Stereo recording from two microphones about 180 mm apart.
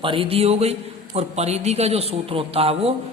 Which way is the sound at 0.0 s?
30° right (ahead or behind).